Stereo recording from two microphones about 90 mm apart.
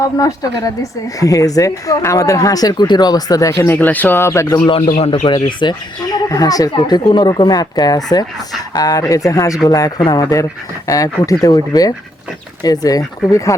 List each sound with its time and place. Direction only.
0.0 s speech: 40° left (ahead or behind)
3.7 s speech: 20° left (ahead or behind)
4.6 s speech: 90° left
5.2 s speech: 60° left (ahead or behind); by 13.6 s 35° left (ahead or behind)